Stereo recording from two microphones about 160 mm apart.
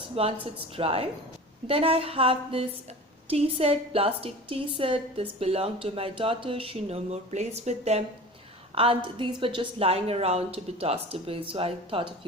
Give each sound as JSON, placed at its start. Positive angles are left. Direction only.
{"t": 0.2, "sound": "a woman's voice", "side_deg": -35}